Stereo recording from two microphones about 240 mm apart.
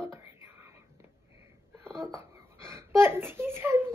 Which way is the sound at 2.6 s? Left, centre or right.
Centre.